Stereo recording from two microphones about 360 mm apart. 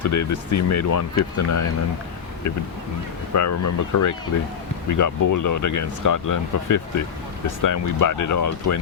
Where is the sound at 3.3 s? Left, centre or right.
Left.